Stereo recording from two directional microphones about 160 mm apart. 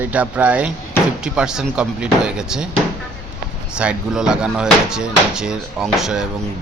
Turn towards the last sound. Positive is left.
turn(degrees=-5)  # may be behind; listen again after turning